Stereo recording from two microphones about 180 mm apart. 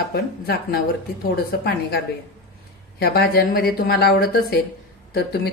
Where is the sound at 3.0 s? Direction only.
60° left (ahead or behind).